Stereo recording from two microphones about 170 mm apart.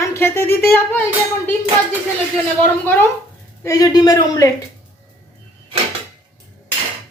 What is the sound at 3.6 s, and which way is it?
Speech, 20° left (ahead or behind).